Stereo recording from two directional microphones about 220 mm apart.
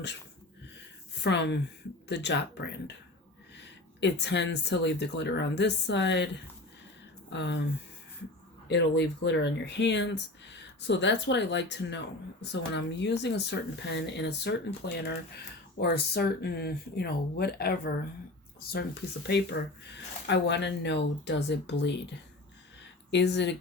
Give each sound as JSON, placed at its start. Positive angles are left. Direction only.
{"t": 1.2, "sound": "speech", "side_deg": 50}
{"t": 4.0, "sound": "speech", "side_deg": 50}
{"t": 15.8, "sound": "speech", "side_deg": 50}
{"t": 19.3, "sound": "speech", "side_deg": 50}